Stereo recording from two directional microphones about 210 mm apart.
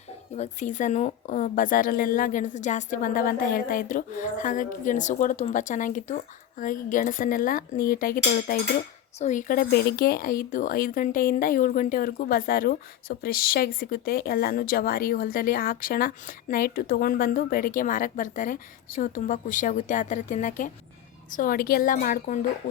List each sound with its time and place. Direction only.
0.3 s speech: 35° left (ahead or behind)